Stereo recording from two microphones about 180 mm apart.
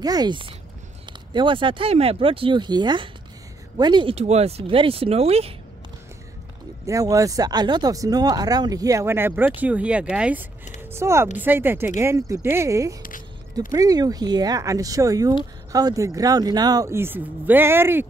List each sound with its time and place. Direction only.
0.0 s speech: 20° right (ahead or behind)
6.9 s speech: 20° right (ahead or behind)